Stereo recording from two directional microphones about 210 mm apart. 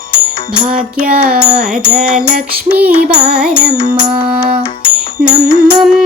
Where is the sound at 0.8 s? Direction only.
40° right (ahead or behind).